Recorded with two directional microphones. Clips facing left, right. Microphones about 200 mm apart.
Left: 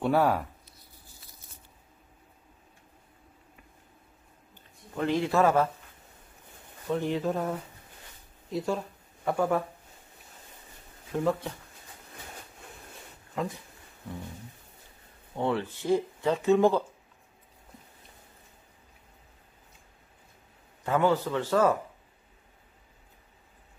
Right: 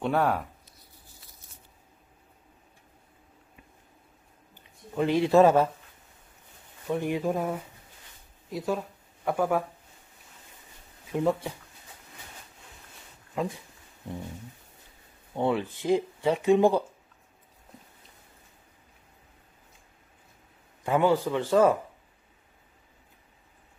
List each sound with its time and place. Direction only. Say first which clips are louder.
0.0 s speech: left 1 dB; 5° left (ahead or behind)
4.9 s speech: right 5 dB; 15° right (ahead or behind)
6.9 s speech: right 1 dB; 15° right (ahead or behind)
11.1 s speech: right 2 dB; 15° right (ahead or behind)
15.3 s speech: right 2 dB; 15° right (ahead or behind)
20.8 s speech: right 2 dB; 15° right (ahead or behind)